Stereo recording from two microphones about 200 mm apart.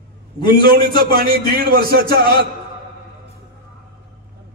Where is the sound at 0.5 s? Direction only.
50° right (ahead or behind).